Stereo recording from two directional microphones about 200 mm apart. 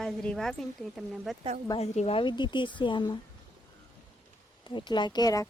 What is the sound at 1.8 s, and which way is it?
Speech, 35° left (ahead or behind).